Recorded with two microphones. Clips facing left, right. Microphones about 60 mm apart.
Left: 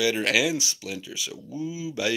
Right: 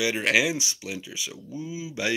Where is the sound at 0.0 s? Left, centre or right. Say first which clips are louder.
Even; right.